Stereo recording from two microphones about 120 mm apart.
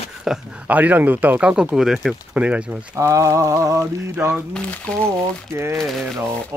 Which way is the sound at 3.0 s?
25° right (ahead or behind).